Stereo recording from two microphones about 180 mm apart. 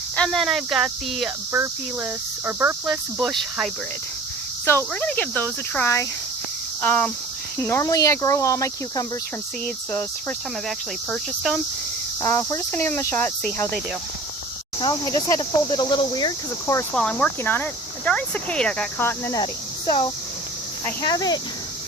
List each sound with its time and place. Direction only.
0.2 s speech: centre (ahead or behind)
1.5 s speech: 10° right (ahead or behind)
4.9 s speech: 5° left (ahead or behind)
12.2 s speech: 15° left (ahead or behind)
14.8 s speech: 20° left (ahead or behind)
16.9 s speech: 5° left (ahead or behind)
20.8 s speech: 20° left (ahead or behind)